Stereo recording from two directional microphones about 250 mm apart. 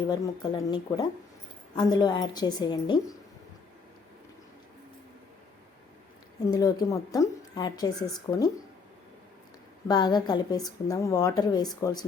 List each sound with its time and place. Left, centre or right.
0.1 s a woman's voice: centre
6.5 s a woman's voice: centre
9.9 s a woman's voice: centre